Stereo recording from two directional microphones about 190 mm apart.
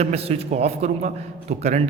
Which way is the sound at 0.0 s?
30° right (ahead or behind).